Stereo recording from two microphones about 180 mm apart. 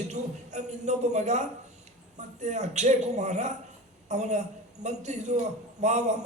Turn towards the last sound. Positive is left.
turn(degrees=-40)  # may be behind; listen again after turning